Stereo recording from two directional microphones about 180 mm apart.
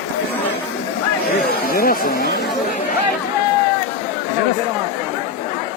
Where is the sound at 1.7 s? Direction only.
55° left (ahead or behind).